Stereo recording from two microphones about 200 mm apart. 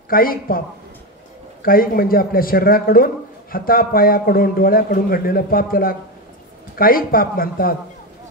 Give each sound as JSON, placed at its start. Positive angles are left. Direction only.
{"t": 0.1, "sound": "a man's voice", "side_deg": 45}
{"t": 1.6, "sound": "a man's voice", "side_deg": 45}